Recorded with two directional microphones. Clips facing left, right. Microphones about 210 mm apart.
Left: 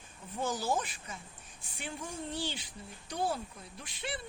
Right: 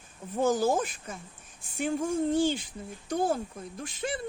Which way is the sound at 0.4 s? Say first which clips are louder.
Right 8 dB; 50° right (ahead or behind).